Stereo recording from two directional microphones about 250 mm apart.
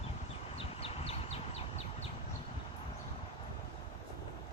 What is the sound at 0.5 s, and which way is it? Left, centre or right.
Bird, left.